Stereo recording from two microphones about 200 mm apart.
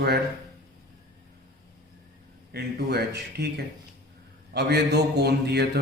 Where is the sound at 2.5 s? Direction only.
55° right (ahead or behind).